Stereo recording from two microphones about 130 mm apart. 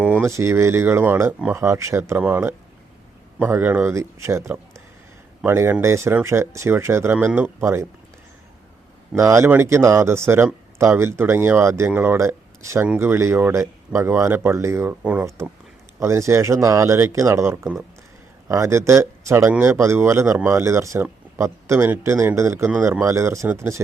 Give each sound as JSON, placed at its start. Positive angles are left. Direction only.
{"t": 0.0, "sound": "a sound", "side_deg": -10}
{"t": 0.3, "sound": "a man's voice", "side_deg": -20}
{"t": 9.1, "sound": "speech", "side_deg": -20}